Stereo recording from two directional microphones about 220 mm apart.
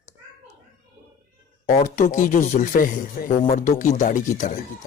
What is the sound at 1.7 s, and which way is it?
Speech, 35° left (ahead or behind).